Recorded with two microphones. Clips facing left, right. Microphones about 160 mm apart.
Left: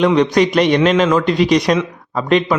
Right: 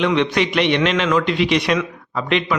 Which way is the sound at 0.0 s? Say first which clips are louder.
Left 5 dB; 40° left (ahead or behind).